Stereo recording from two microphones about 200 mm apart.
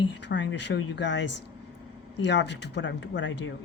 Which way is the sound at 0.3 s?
60° left (ahead or behind).